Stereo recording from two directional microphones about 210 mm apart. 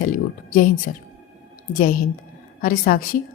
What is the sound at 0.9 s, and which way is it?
Speech, 40° left (ahead or behind).